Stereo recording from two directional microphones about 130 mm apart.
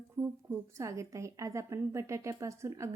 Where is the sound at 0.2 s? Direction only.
20° right (ahead or behind).